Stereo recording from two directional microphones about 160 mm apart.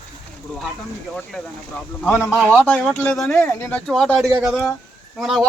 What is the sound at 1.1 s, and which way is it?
Speech, 5° left (ahead or behind).